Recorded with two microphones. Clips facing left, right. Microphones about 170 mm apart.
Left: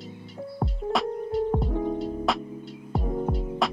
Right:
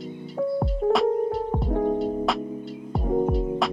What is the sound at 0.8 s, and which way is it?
Music, 55° right (ahead or behind).